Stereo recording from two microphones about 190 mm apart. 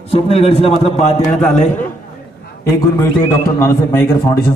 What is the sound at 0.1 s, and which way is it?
A man's voice, 30° left (ahead or behind).